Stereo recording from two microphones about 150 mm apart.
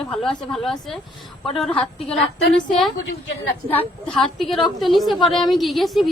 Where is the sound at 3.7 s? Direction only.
5° left (ahead or behind).